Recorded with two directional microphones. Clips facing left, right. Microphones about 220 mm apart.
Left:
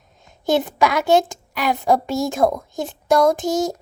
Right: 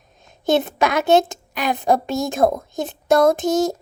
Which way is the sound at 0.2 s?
20° right (ahead or behind).